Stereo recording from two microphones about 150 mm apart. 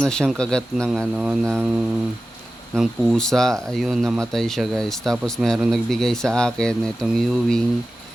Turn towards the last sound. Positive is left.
turn(degrees=5)  # may be behind; listen again after turning